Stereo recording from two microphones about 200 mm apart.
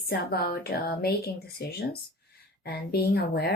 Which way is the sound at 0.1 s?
50° left (ahead or behind).